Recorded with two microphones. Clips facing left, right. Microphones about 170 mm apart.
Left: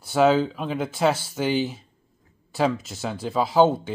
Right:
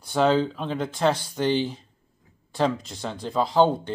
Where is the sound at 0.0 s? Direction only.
5° left (ahead or behind).